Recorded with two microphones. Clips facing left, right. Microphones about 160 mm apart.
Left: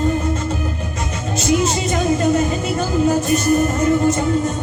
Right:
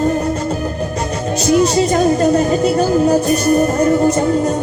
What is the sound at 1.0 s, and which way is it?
A man's voice, 35° right (ahead or behind).